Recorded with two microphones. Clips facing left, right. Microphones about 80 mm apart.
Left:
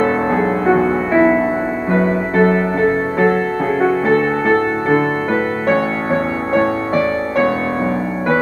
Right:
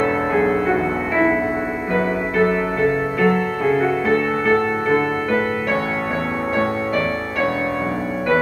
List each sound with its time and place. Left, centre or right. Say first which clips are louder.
0.0 s music: left 2 dB; left
3.8 s music: left 4 dB; left